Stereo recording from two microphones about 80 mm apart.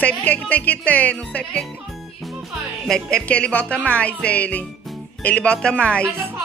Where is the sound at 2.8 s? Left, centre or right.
Centre.